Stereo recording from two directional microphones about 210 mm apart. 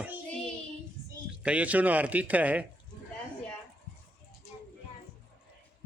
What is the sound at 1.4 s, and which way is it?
Speech, 5° right (ahead or behind).